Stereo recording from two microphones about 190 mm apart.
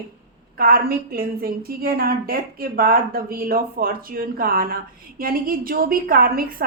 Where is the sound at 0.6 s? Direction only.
50° right (ahead or behind).